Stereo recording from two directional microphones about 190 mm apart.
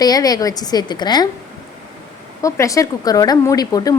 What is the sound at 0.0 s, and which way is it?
Speech, 20° left (ahead or behind).